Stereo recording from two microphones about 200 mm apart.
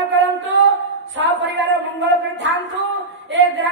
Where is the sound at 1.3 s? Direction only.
65° right (ahead or behind).